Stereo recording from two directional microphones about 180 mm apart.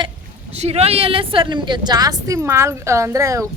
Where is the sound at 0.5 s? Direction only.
35° right (ahead or behind).